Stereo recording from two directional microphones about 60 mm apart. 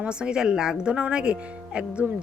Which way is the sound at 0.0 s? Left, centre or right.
Centre.